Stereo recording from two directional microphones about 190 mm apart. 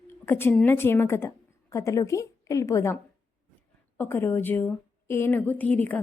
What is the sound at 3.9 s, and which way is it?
A woman's voice, 10° left (ahead or behind).